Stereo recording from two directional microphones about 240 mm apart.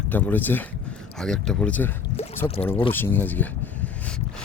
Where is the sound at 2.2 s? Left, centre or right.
Left.